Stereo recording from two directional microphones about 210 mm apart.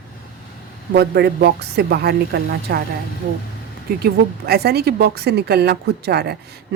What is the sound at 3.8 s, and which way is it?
A woman's voice, 50° right (ahead or behind).